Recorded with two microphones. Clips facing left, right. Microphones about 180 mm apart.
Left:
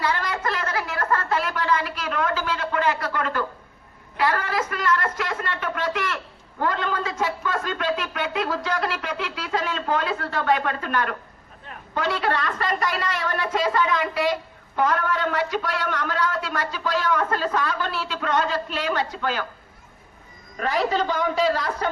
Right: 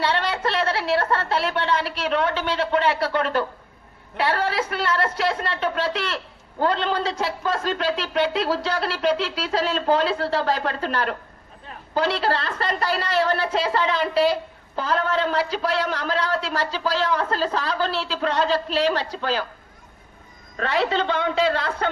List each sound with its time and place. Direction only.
0.2 s a sound: 30° right (ahead or behind)
4.2 s a man's voice: 30° right (ahead or behind)
20.6 s a woman's voice: 75° right (ahead or behind)